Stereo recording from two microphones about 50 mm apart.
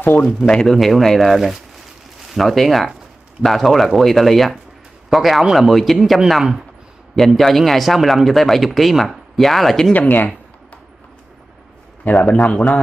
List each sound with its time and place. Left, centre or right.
0.0 s speech: left
0.7 s speech: centre
9.9 s speech: left
12.0 s a man's voice: left